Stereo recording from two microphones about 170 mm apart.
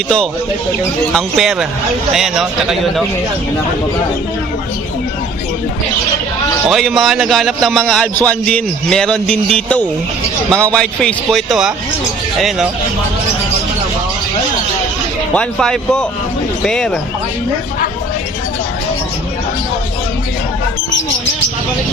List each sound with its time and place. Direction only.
1.1 s a man's voice: centre (ahead or behind)
6.7 s a man's voice: centre (ahead or behind)
15.3 s a man's voice: 5° left (ahead or behind)